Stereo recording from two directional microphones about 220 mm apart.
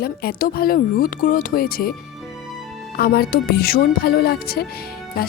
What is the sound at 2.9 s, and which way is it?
Speech, 45° left (ahead or behind).